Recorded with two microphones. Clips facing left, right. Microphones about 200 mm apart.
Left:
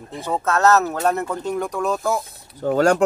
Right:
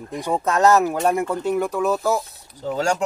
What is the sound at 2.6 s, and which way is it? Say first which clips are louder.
Speech: left 6 dB; 55° left (ahead or behind).